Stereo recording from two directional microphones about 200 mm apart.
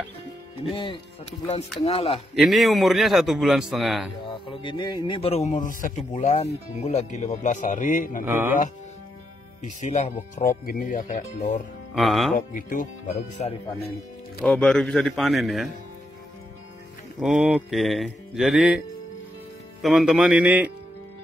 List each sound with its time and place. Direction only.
1.9 s speech: 30° left (ahead or behind)
2.3 s a man's voice: centre (ahead or behind)
4.3 s speech: 25° left (ahead or behind); by 8.2 s 40° left (ahead or behind)
8.3 s speech: 10° right (ahead or behind)
9.6 s speech: 35° left (ahead or behind)
11.9 s a man's voice: centre (ahead or behind)
12.4 s speech: 40° left (ahead or behind)
14.4 s a man's voice: 5° left (ahead or behind)
17.2 s a man's voice: centre (ahead or behind)
19.8 s a man's voice: centre (ahead or behind)